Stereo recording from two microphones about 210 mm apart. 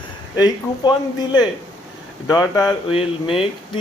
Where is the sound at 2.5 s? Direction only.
20° left (ahead or behind).